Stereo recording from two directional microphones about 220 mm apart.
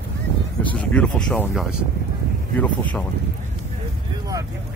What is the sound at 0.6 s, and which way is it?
Speech, 5° left (ahead or behind).